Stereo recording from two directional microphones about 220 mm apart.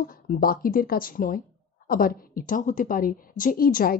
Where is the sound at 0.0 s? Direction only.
40° left (ahead or behind).